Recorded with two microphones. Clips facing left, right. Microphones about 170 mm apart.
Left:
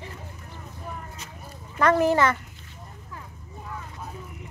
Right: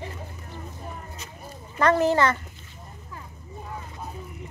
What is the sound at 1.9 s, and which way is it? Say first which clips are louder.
Speech: even; 10° left (ahead or behind).